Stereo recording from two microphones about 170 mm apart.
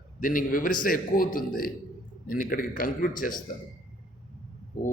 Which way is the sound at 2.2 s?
55° left (ahead or behind).